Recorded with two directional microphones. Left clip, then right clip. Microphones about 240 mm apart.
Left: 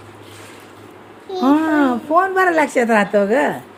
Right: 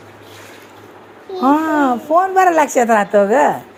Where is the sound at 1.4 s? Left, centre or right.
Centre.